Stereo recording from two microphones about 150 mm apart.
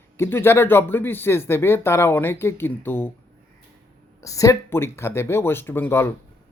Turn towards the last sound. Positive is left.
turn(degrees=15)  # may be behind; listen again after turning